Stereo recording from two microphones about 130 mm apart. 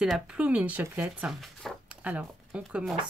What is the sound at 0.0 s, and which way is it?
Speech, 5° right (ahead or behind).